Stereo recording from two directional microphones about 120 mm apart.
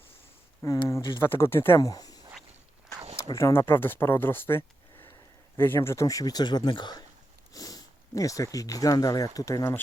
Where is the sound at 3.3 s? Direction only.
20° left (ahead or behind).